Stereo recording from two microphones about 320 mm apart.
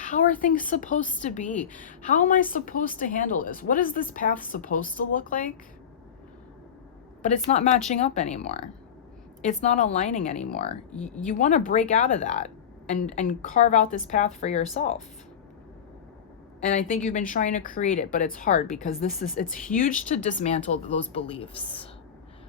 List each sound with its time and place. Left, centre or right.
0.0 s a woman's voice: left
7.2 s a woman's voice: left
10.9 s speech: centre
11.3 s a woman's voice: left
16.6 s a woman's voice: left